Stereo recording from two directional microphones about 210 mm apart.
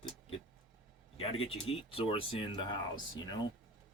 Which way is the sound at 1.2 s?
25° left (ahead or behind).